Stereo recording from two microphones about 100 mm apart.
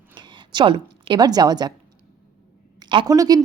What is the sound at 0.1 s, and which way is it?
A woman's voice, 50° right (ahead or behind).